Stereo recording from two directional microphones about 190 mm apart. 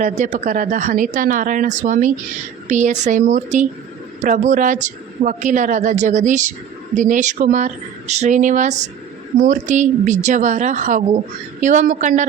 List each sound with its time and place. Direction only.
0.0 s a man's voice: 40° right (ahead or behind)